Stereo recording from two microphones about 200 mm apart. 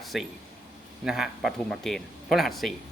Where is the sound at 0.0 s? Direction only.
Centre (ahead or behind).